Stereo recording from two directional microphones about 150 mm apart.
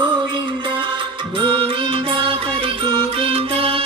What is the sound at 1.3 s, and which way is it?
Music, 35° right (ahead or behind).